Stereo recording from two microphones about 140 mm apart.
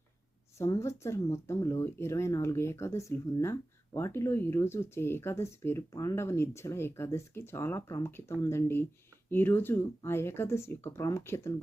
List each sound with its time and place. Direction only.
0.6 s speech: 20° left (ahead or behind)